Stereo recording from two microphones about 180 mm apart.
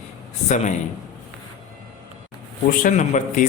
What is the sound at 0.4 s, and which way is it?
Speech, 40° left (ahead or behind).